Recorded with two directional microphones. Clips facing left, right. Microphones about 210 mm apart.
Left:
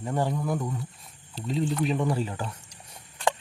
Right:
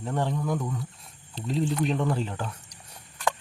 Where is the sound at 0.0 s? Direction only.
10° left (ahead or behind).